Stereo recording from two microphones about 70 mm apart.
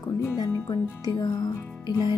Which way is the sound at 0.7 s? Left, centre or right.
Left.